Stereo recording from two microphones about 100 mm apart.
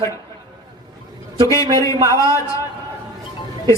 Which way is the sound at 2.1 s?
30° left (ahead or behind).